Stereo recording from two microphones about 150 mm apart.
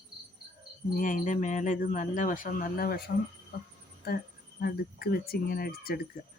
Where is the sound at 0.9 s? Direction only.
65° left (ahead or behind); by 6.0 s 85° left.